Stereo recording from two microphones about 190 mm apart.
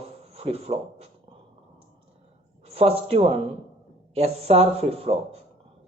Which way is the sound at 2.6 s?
30° right (ahead or behind).